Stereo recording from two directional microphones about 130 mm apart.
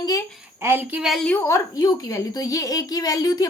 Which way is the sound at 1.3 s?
20° left (ahead or behind).